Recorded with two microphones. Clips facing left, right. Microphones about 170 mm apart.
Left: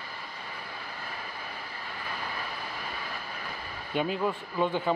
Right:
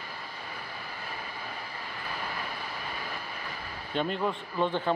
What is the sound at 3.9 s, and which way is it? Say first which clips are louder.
A man's voice: left 1 dB; 5° left (ahead or behind).